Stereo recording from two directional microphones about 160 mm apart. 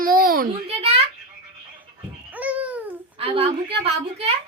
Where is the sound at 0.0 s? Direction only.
65° right (ahead or behind).